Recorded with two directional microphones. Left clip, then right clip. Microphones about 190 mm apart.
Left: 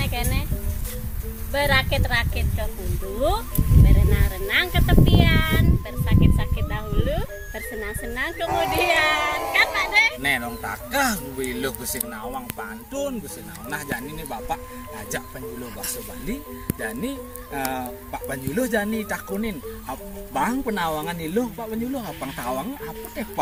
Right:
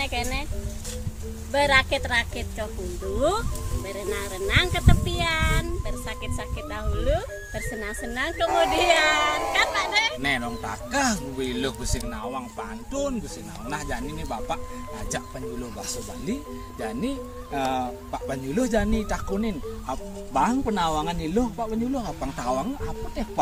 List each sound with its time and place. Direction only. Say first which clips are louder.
0.0 s music: right 1 dB; centre (ahead or behind)
1.5 s speech: right 1 dB; centre (ahead or behind)
14.3 s speech: left 1 dB; 15° right (ahead or behind)
16.8 s speech: right 1 dB; 15° right (ahead or behind)